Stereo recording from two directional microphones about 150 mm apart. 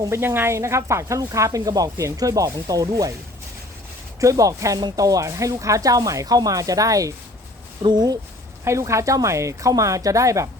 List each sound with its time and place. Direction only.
0.0 s speech: 15° right (ahead or behind)
4.2 s speech: 20° right (ahead or behind)